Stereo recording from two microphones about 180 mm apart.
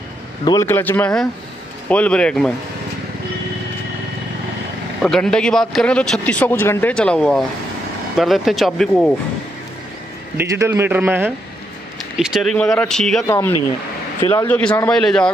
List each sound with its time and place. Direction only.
0.5 s speech: 15° left (ahead or behind)
5.0 s speech: 5° left (ahead or behind)
10.3 s a man's voice: 15° right (ahead or behind); by 14.5 s 20° left (ahead or behind)
14.5 s speech: 5° left (ahead or behind)